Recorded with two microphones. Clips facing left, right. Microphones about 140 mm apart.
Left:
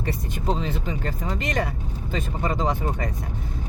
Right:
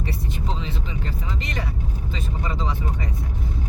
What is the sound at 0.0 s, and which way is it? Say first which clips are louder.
Vehicle: left 2 dB; 50° left (ahead or behind).